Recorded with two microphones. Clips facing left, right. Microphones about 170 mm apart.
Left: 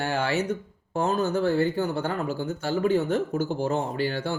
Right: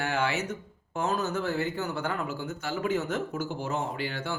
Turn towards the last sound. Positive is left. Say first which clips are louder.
# left 6 dB
turn(degrees=35)  # may be behind; listen again after turning